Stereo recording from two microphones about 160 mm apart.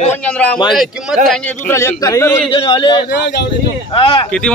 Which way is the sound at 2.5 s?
30° left (ahead or behind).